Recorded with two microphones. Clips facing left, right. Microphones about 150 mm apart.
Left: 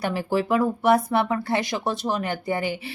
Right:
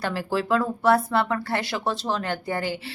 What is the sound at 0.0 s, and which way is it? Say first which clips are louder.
A woman's voice: left 2 dB; 15° left (ahead or behind).